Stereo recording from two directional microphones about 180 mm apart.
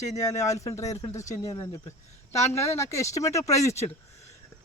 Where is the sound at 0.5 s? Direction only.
20° left (ahead or behind).